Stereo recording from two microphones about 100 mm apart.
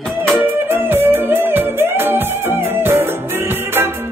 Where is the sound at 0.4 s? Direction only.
20° right (ahead or behind).